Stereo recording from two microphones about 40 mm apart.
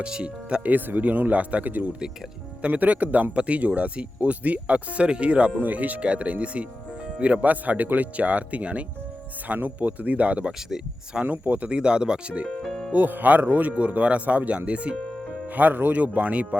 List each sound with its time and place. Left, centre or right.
0.0 s speech: right
0.6 s speech: right
5.6 s speech: right
9.5 s speech: right
11.3 s speech: right
11.7 s speech: right
12.6 s music: centre
12.9 s speech: right
15.5 s speech: right
16.0 s speech: right